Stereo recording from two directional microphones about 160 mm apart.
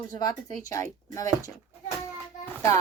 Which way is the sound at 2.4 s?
15° left (ahead or behind).